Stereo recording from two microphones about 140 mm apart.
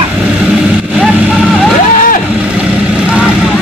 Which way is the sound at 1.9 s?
75° left (ahead or behind).